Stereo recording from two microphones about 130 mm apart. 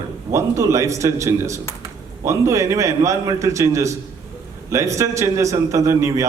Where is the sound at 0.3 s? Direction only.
25° right (ahead or behind).